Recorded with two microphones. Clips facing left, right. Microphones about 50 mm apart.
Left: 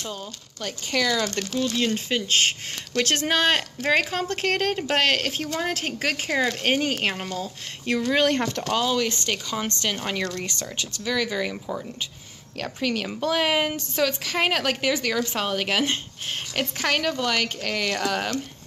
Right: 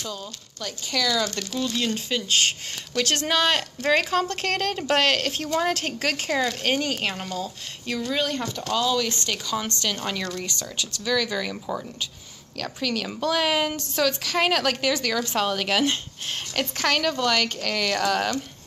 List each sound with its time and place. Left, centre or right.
0.0 s a woman's voice: left
3.3 s a woman's voice: left
8.1 s speech: left
8.6 s a woman's voice: left
10.2 s speech: left
11.1 s a woman's voice: centre